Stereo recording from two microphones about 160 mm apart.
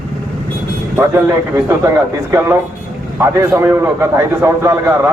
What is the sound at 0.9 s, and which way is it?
A man's voice, 15° right (ahead or behind).